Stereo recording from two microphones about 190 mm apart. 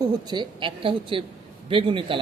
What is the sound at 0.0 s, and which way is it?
A man's voice, 20° right (ahead or behind).